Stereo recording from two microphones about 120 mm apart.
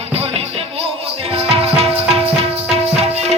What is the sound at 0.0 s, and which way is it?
Music, 60° right (ahead or behind).